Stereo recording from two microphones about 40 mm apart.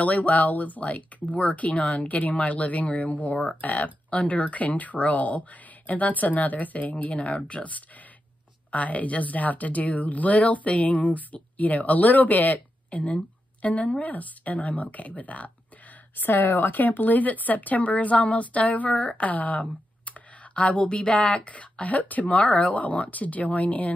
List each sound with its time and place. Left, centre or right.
0.0 s speech: left
14.0 s speech: left
16.2 s speech: left